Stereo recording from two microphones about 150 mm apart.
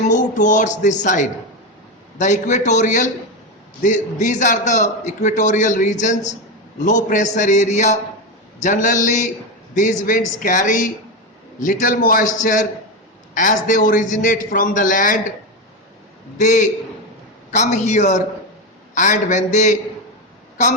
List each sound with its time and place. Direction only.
0.1 s a man's voice: 55° left (ahead or behind)
16.4 s a man's voice: 55° left (ahead or behind)